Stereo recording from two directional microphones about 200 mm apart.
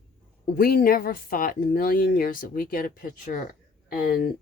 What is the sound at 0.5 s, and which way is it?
Speech, 45° left (ahead or behind).